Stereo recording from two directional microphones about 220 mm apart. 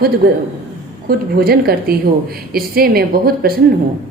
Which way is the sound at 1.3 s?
45° right (ahead or behind).